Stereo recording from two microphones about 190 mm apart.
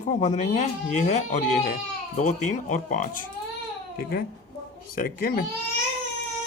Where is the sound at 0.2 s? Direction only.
40° left (ahead or behind).